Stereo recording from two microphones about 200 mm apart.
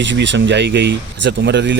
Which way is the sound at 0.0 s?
65° right (ahead or behind).